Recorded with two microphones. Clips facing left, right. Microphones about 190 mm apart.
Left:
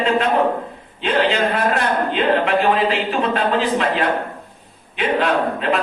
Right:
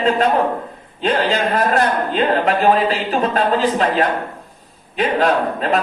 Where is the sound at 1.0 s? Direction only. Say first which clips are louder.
Even; 40° right (ahead or behind).